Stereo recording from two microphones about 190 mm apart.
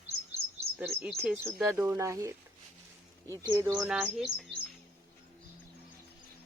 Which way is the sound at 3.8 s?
Centre (ahead or behind).